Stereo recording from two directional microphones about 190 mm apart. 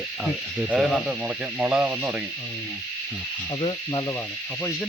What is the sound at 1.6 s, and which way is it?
Speech, 10° right (ahead or behind).